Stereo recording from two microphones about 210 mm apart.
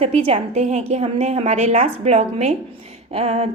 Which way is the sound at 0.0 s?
30° right (ahead or behind).